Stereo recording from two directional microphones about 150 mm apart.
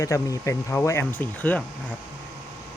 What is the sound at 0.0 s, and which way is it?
Speech, 20° left (ahead or behind).